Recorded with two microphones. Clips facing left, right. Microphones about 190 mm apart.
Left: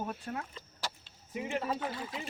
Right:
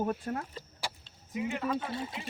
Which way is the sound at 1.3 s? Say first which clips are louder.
Right 2 dB; 30° left (ahead or behind).